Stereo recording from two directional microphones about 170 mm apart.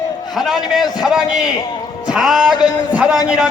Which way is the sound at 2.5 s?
25° left (ahead or behind).